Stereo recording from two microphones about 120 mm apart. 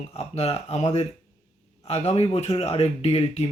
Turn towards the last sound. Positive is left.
turn(degrees=60)  # may be behind; listen again after turning